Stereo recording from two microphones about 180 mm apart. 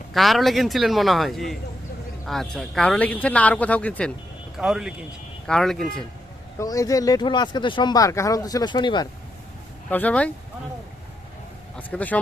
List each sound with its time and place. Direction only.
0.1 s a man's voice: centre (ahead or behind)
6.6 s speech: 20° left (ahead or behind)
9.9 s speech: 10° left (ahead or behind)
11.8 s speech: 10° left (ahead or behind)